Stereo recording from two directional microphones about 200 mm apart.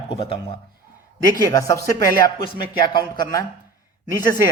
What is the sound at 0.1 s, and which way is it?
Speech, 25° left (ahead or behind).